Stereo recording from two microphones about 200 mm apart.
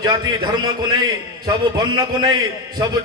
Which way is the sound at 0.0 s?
20° right (ahead or behind).